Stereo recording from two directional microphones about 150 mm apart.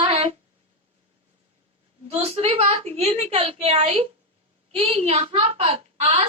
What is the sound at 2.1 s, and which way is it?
A woman's voice, 40° right (ahead or behind).